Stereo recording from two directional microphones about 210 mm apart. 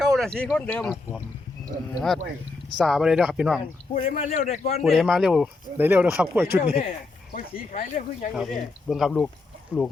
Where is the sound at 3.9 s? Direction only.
40° left (ahead or behind).